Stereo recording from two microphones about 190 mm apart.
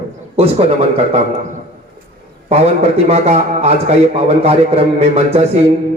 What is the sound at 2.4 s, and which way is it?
A man's voice, 35° right (ahead or behind).